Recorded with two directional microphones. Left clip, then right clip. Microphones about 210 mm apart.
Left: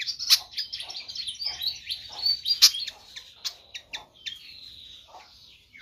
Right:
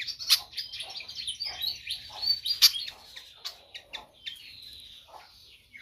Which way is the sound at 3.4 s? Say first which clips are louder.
Left 6 dB; 50° left (ahead or behind).